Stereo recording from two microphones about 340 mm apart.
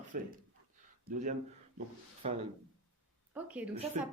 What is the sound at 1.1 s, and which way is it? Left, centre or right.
Speech, right.